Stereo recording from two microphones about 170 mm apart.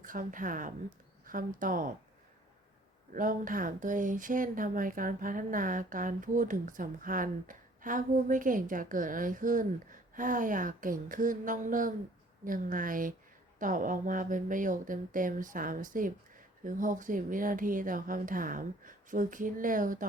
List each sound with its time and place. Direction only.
0.0 s speech: 50° right (ahead or behind)
3.1 s speech: 50° right (ahead or behind)